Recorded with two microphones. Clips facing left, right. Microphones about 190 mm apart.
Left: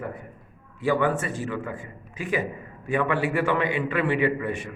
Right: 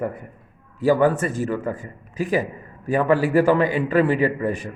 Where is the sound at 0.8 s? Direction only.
40° right (ahead or behind).